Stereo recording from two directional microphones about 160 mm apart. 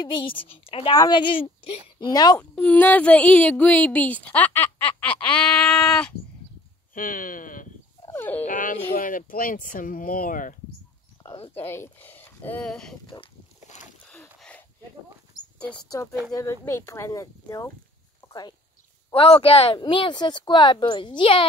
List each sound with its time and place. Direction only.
0.0 s a woman's voice: 30° left (ahead or behind)
2.5 s a woman's voice: 10° left (ahead or behind)
6.9 s speech: 60° left (ahead or behind)
8.1 s dog: 10° left (ahead or behind)
8.5 s speech: 55° left (ahead or behind)
11.6 s speech: 15° left (ahead or behind)
13.0 s speech: 30° left (ahead or behind)
14.0 s a sound: 5° left (ahead or behind)
16.0 s a woman's voice: 20° left (ahead or behind)
18.2 s a sound: 15° left (ahead or behind)
19.1 s speech: 35° left (ahead or behind)